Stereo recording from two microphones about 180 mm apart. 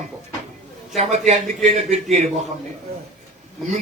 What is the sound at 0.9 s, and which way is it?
A man's voice, 40° right (ahead or behind).